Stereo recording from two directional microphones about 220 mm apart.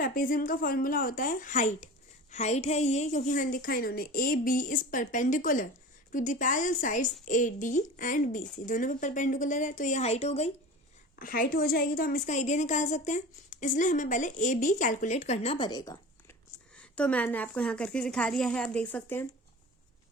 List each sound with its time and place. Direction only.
0.0 s a woman's voice: 40° left (ahead or behind)
11.2 s a woman's voice: 40° left (ahead or behind); by 16.0 s 20° left (ahead or behind)
16.7 s a woman's voice: 5° left (ahead or behind)